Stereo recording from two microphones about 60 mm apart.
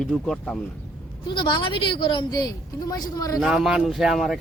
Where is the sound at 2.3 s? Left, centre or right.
Left.